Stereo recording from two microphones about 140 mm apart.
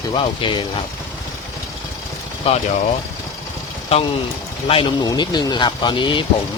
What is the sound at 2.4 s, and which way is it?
Speech, 45° left (ahead or behind).